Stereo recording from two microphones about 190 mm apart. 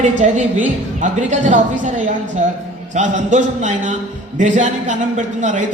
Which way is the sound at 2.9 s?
40° right (ahead or behind).